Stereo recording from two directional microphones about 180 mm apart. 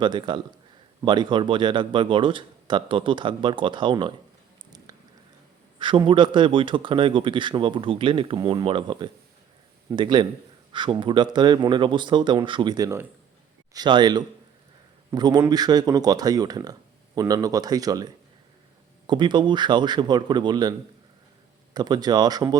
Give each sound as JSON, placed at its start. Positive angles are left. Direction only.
{"t": 0.0, "sound": "speech", "side_deg": -25}
{"t": 4.9, "sound": "a sound", "side_deg": -20}
{"t": 5.8, "sound": "speech", "side_deg": -25}